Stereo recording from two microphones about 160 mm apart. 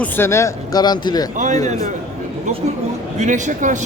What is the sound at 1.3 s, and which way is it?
Speech, 50° right (ahead or behind).